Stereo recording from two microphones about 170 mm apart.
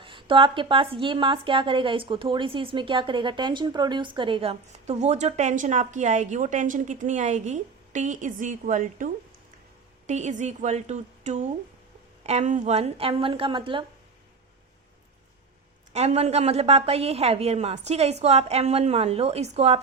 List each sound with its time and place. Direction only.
0.0 s a woman's voice: 30° right (ahead or behind); by 9.0 s 50° right (ahead or behind)
10.1 s a woman's voice: 45° right (ahead or behind)
15.9 s a woman's voice: 40° right (ahead or behind)